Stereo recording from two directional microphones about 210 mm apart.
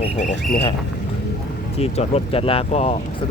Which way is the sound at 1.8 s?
30° left (ahead or behind).